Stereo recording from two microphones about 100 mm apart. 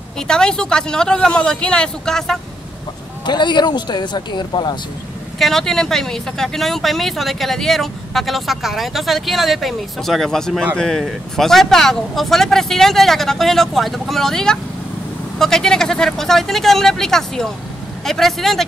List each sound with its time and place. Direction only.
0.3 s speech: 5° left (ahead or behind)
3.3 s speech: 50° left (ahead or behind)
5.4 s speech: 5° left (ahead or behind)